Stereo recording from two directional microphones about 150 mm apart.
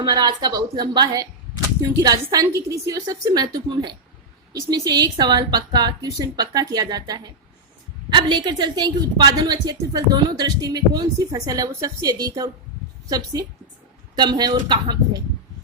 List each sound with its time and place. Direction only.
0.0 s a woman's voice: 30° right (ahead or behind)